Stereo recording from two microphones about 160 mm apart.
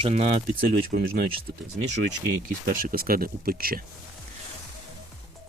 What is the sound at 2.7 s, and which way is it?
Speech, 65° right (ahead or behind).